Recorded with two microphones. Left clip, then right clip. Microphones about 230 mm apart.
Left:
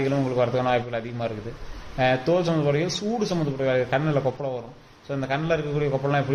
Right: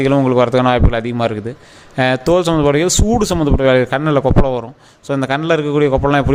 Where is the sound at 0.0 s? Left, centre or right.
Right.